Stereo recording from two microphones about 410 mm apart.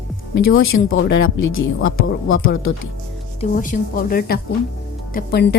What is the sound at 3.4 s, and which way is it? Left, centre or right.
A woman's voice, centre.